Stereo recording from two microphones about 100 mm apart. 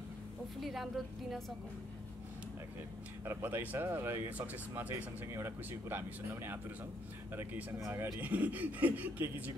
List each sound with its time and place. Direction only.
0.6 s a woman's voice: centre (ahead or behind)
3.3 s speech: 25° right (ahead or behind)